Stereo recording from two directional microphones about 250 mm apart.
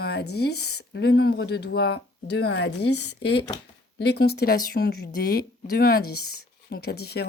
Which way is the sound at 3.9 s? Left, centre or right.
Left.